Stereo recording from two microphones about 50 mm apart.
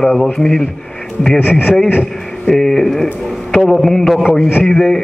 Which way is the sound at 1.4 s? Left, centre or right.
Left.